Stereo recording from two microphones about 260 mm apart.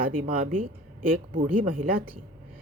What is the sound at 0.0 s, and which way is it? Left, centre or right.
Speech, right.